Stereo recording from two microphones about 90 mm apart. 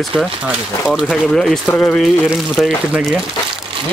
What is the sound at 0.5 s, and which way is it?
Speech, 10° right (ahead or behind).